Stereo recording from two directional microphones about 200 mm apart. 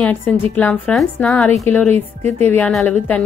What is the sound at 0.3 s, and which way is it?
A woman's voice, 5° left (ahead or behind).